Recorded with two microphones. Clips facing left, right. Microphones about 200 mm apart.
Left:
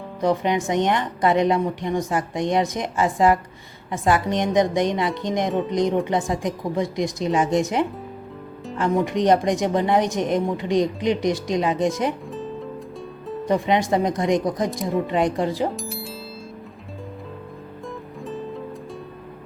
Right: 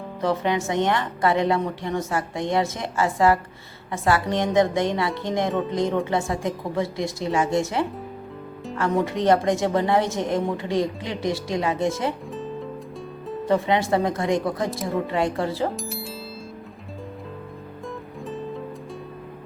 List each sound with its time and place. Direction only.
0.2 s a woman's voice: 15° left (ahead or behind)
9.0 s a woman's voice: 15° left (ahead or behind)
12.3 s music: centre (ahead or behind)
13.4 s a woman's voice: 15° left (ahead or behind)
14.7 s speech: centre (ahead or behind)
15.0 s a woman's voice: 20° left (ahead or behind)
15.7 s music: centre (ahead or behind)
18.3 s music: centre (ahead or behind)